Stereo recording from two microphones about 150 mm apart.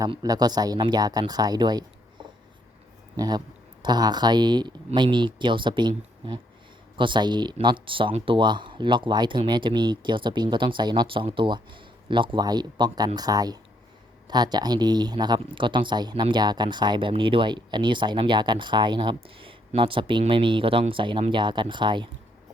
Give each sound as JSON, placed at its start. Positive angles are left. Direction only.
{"t": 0.1, "sound": "speech", "side_deg": -25}
{"t": 6.9, "sound": "speech", "side_deg": -30}